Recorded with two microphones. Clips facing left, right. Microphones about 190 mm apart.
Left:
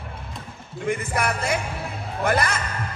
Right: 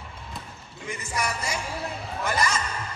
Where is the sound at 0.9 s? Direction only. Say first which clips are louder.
Left 6 dB; 55° left (ahead or behind).